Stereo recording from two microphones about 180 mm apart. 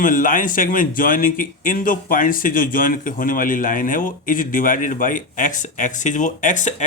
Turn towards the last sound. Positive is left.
turn(degrees=45)  # may be behind; listen again after turning